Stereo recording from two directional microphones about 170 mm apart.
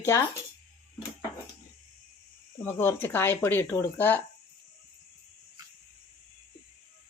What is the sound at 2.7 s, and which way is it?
Speech, 15° left (ahead or behind).